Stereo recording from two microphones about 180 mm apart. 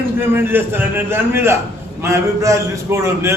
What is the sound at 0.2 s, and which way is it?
A man's voice, 10° right (ahead or behind).